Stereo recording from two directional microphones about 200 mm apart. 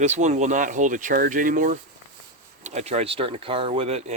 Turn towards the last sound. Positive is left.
turn(degrees=-30)  # may be behind; listen again after turning